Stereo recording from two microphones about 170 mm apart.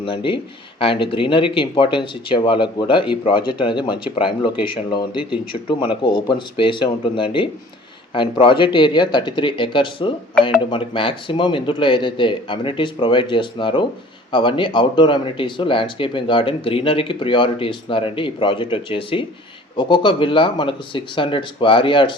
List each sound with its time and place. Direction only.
0.0 s speech: 30° left (ahead or behind)
5.1 s speech: 5° right (ahead or behind)
5.6 s speech: 30° left (ahead or behind)